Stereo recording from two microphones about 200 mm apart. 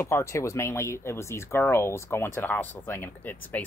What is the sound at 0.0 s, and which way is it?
Speech, 15° left (ahead or behind).